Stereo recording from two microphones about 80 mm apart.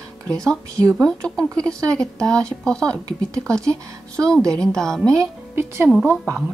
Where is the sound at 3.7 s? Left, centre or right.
Right.